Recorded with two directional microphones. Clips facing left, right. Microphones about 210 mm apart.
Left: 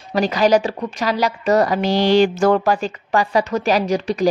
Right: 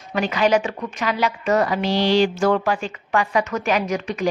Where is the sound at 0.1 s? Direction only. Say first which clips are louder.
Left 3 dB; 35° left (ahead or behind).